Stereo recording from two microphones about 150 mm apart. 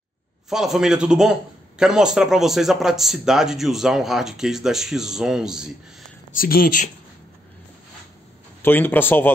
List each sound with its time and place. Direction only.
0.5 s speech: 5° right (ahead or behind)
6.3 s speech: 75° left (ahead or behind)
8.6 s speech: 15° left (ahead or behind)